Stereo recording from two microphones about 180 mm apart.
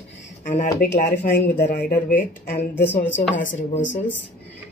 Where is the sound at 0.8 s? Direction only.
55° left (ahead or behind).